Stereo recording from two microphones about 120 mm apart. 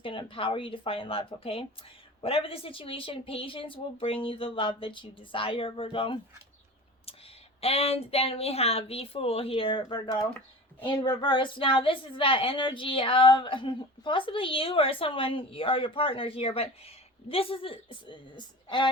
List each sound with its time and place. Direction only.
0.0 s a woman's voice: 45° left (ahead or behind)
7.6 s a woman's voice: 55° left (ahead or behind); by 18.9 s 40° left (ahead or behind)